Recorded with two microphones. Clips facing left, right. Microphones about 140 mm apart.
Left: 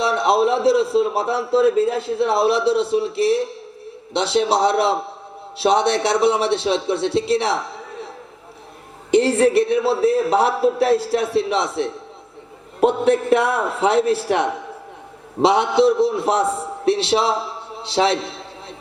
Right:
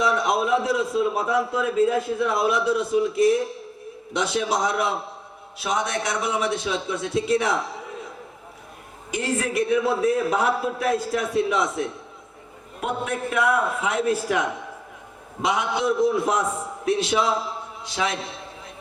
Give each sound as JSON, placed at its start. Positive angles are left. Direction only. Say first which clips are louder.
{"t": 0.0, "sound": "speech", "louder": "left 5 dB", "side_deg": 30}
{"t": 9.4, "sound": "a man's voice", "louder": "left 6 dB", "side_deg": 30}